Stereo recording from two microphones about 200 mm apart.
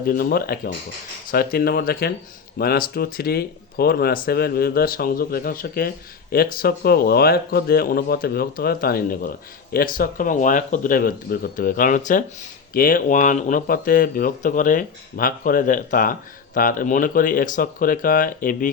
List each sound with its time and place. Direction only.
0.0 s speech: 50° left (ahead or behind)